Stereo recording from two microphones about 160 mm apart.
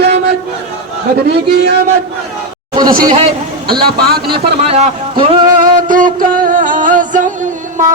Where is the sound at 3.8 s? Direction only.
75° right (ahead or behind).